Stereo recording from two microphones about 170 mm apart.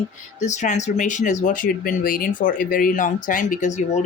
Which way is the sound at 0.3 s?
45° left (ahead or behind).